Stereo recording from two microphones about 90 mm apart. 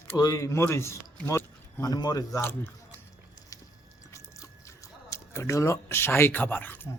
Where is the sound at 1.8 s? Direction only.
45° left (ahead or behind).